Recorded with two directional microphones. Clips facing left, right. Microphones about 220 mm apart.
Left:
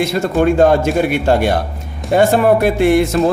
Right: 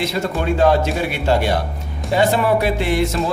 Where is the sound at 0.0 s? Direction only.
50° left (ahead or behind).